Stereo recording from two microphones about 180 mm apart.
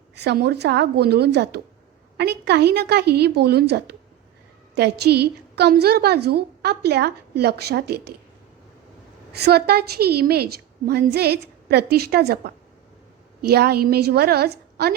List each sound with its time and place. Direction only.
0.2 s a woman's voice: 65° right (ahead or behind)
9.3 s a woman's voice: 65° right (ahead or behind)